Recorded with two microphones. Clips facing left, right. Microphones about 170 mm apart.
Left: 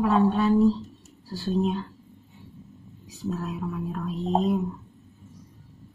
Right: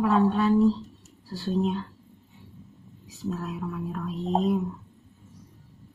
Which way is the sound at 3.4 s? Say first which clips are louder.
Left 1 dB; centre (ahead or behind).